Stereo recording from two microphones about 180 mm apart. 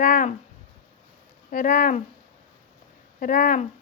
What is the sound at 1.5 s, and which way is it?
Speech, 50° left (ahead or behind).